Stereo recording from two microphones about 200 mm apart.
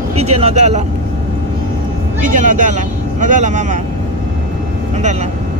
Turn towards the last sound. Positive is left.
turn(degrees=-40)  # may be behind; listen again after turning